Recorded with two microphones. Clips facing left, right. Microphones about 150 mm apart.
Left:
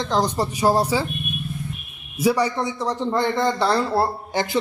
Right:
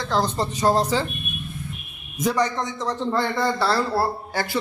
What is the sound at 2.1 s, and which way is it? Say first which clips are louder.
A man's voice: left 2 dB; 10° left (ahead or behind).